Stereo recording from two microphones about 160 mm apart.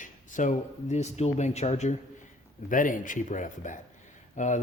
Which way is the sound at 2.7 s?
55° left (ahead or behind).